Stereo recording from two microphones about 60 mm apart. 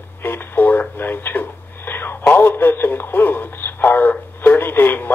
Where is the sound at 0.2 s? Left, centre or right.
Left.